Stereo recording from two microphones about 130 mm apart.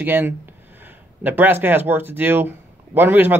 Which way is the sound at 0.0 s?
15° right (ahead or behind).